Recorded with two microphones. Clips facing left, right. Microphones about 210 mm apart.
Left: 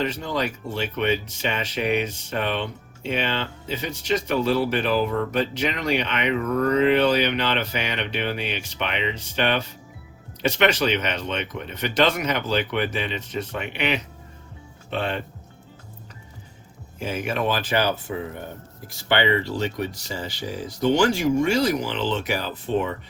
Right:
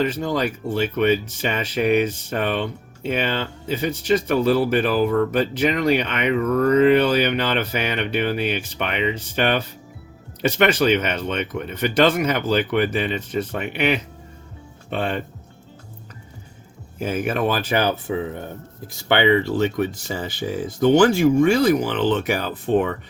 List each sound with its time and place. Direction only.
0.0 s speech: 45° right (ahead or behind)
17.0 s speech: 50° right (ahead or behind)
19.0 s speech: 50° right (ahead or behind)